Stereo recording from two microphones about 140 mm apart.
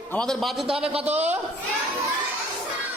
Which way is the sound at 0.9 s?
50° right (ahead or behind).